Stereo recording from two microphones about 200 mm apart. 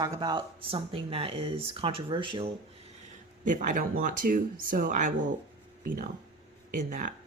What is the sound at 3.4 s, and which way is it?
Speech, 40° right (ahead or behind).